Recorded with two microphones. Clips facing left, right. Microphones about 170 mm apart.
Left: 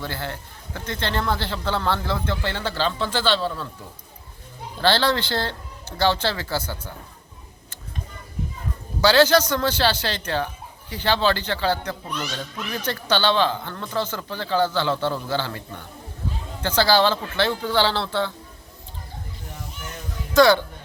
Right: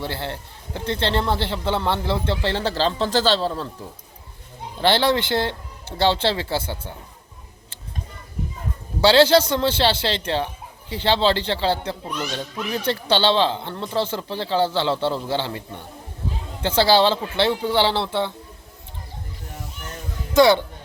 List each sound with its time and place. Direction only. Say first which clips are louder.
0.0 s a man's voice: right 2 dB; 25° right (ahead or behind)
4.8 s a man's voice: right 2 dB; 20° right (ahead or behind)
9.0 s a man's voice: right 2 dB; 25° right (ahead or behind)
12.0 s speech: right 2 dB; 5° right (ahead or behind)
12.3 s a man's voice: right 4 dB; 25° right (ahead or behind)
20.3 s a man's voice: right 1 dB; 20° right (ahead or behind)